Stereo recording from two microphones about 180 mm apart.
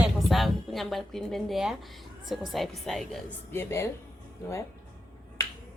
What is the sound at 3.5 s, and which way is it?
Speech, 15° left (ahead or behind).